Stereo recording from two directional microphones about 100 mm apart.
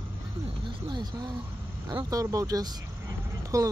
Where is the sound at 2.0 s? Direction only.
35° right (ahead or behind).